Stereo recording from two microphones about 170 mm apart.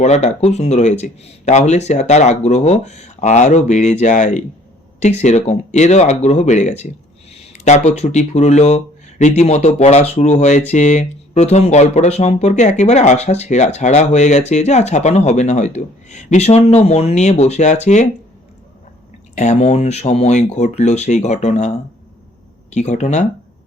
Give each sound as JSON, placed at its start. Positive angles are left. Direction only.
{"t": 0.0, "sound": "speech", "side_deg": 40}
{"t": 19.4, "sound": "speech", "side_deg": 40}
{"t": 22.7, "sound": "speech", "side_deg": 40}